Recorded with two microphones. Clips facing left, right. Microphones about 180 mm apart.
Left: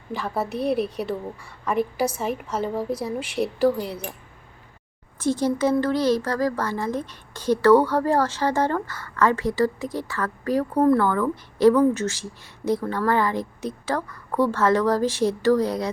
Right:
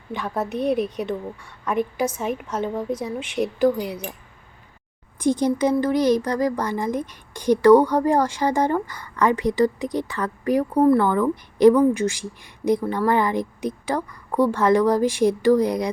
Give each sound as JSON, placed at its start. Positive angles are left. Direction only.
{"t": 0.1, "sound": "a woman's voice", "side_deg": 5}
{"t": 0.8, "sound": "speech", "side_deg": 30}
{"t": 1.0, "sound": "a woman's voice", "side_deg": 5}
{"t": 5.2, "sound": "a woman's voice", "side_deg": -15}